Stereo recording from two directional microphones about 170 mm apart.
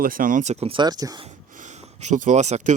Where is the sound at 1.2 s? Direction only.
45° right (ahead or behind).